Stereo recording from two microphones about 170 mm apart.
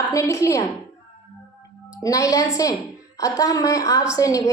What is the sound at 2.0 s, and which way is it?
A woman's voice, 20° left (ahead or behind).